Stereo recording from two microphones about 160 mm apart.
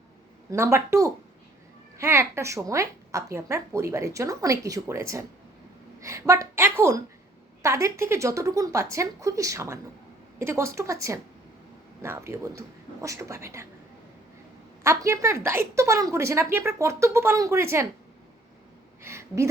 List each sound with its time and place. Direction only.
0.5 s a woman's voice: 15° right (ahead or behind)
14.8 s a woman's voice: 20° right (ahead or behind)
19.0 s speech: 15° right (ahead or behind)